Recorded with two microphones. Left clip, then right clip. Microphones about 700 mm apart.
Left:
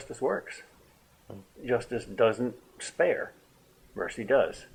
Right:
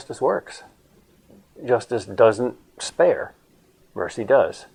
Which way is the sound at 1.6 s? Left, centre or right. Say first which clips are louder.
Right 8 dB; right.